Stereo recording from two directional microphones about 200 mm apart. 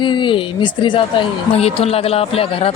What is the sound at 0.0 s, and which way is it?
Speech, 25° left (ahead or behind).